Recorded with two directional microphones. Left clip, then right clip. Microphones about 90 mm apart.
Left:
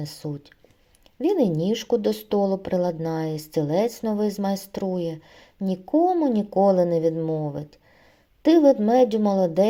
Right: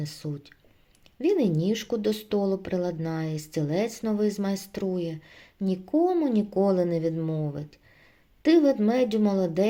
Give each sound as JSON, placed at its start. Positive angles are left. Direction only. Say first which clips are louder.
{"t": 0.0, "sound": "speech", "louder": "left 3 dB", "side_deg": 30}